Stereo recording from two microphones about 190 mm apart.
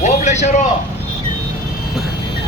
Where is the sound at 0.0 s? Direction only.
35° left (ahead or behind).